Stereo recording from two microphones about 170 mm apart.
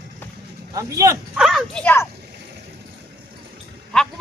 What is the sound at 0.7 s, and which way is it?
Speech, 20° right (ahead or behind).